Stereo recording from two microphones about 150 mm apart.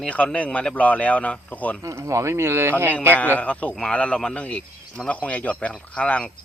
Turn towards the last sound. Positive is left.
turn(degrees=10)  # may be behind; listen again after turning